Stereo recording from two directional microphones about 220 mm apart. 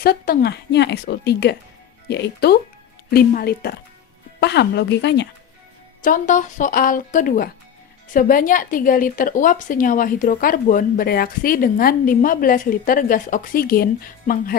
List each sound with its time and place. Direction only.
0.0 s a woman's voice: 45° left (ahead or behind)
6.0 s a woman's voice: 35° left (ahead or behind)